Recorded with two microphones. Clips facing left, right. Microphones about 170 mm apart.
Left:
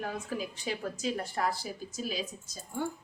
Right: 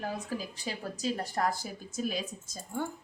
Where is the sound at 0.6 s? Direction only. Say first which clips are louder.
Even; 35° right (ahead or behind).